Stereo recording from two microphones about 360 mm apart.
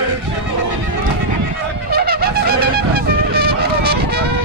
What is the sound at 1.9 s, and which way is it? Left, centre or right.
Music, right.